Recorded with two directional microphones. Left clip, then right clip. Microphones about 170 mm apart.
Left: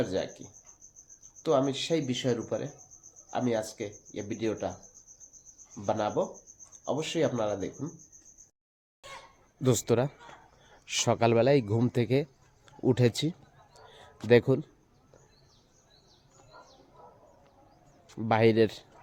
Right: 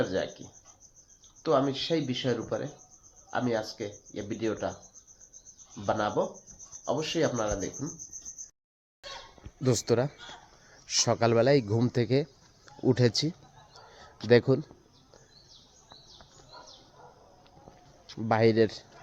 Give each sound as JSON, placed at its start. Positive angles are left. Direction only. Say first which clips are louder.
{"t": 0.0, "sound": "speech", "louder": "right 1 dB", "side_deg": 15}
{"t": 5.7, "sound": "speech", "louder": "right 1 dB", "side_deg": 15}
{"t": 9.6, "sound": "speech", "louder": "even", "side_deg": 5}
{"t": 13.9, "sound": "a sound", "louder": "even", "side_deg": 5}
{"t": 18.1, "sound": "speech", "louder": "even", "side_deg": 5}